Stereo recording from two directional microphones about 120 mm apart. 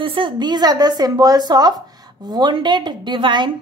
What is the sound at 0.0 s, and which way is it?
A woman's voice, 45° right (ahead or behind).